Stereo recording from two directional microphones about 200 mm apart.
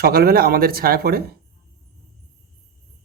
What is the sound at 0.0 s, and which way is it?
Speech, 50° right (ahead or behind).